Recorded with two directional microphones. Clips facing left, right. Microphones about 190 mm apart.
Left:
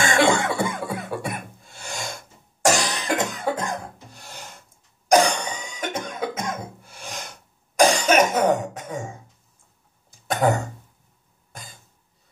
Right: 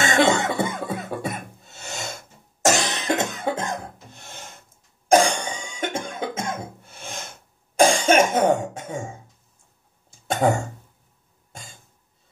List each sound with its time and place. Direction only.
0.0 s cough: 20° right (ahead or behind)
4.1 s filing: 25° right (ahead or behind)
5.0 s cough: 25° right (ahead or behind)
10.1 s cough: 25° right (ahead or behind)